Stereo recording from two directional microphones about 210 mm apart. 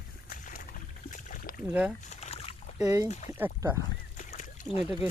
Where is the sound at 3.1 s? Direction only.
30° left (ahead or behind).